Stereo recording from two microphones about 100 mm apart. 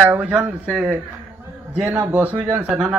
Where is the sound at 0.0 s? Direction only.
20° right (ahead or behind).